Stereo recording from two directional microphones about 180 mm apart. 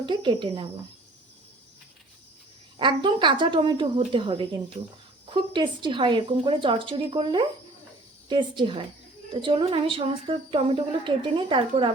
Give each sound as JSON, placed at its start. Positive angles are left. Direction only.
{"t": 0.0, "sound": "a woman's voice", "side_deg": -25}
{"t": 2.7, "sound": "a woman's voice", "side_deg": -25}